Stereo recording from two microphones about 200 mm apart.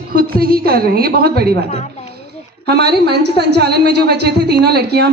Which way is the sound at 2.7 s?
55° right (ahead or behind).